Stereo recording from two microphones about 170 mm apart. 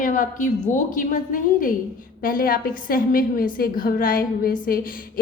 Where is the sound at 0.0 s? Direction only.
50° left (ahead or behind).